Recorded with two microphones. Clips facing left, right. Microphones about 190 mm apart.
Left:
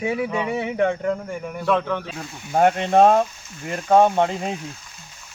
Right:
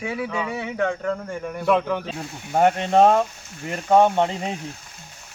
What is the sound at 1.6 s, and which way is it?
Speech, 10° right (ahead or behind).